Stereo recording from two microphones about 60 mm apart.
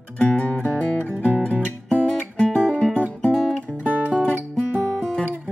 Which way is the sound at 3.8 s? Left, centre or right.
Right.